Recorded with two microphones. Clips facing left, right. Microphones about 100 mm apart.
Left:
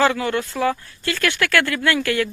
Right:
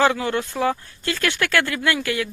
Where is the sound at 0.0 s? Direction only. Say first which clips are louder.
Left 1 dB; 20° right (ahead or behind).